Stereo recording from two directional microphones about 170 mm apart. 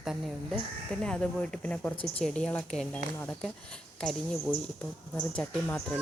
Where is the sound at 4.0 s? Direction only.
5° left (ahead or behind).